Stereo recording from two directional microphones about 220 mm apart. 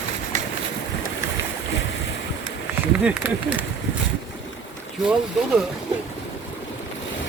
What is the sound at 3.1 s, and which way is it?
Speech, 5° right (ahead or behind).